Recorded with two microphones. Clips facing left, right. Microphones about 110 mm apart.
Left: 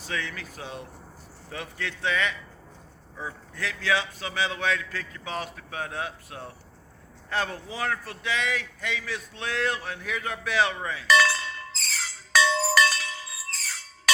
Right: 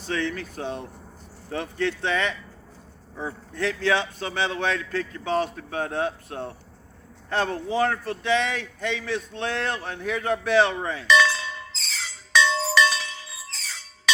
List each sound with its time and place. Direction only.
0.0 s a man's voice: 30° right (ahead or behind)
11.0 s chink: 5° left (ahead or behind)
11.9 s music: 5° left (ahead or behind)